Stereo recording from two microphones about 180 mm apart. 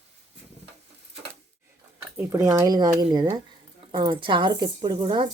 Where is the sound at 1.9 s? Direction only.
10° right (ahead or behind).